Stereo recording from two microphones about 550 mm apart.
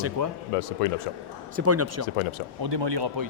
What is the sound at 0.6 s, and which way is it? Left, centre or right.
Speech, left.